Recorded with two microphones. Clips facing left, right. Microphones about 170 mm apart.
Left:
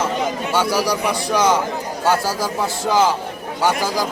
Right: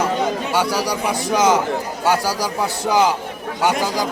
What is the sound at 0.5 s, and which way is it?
A man's voice, 15° right (ahead or behind).